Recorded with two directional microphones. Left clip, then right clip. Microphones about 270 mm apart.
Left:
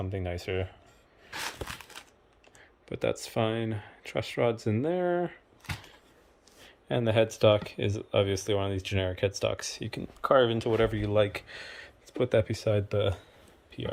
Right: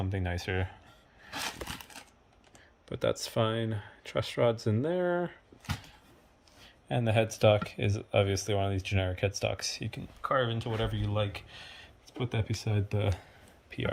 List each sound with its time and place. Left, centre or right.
0.0 s speech: centre
2.9 s speech: centre
6.7 s speech: centre
10.2 s speech: centre
13.7 s a sound: centre